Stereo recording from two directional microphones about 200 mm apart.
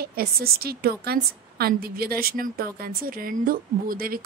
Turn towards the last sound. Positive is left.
turn(degrees=-45)  # may be behind; listen again after turning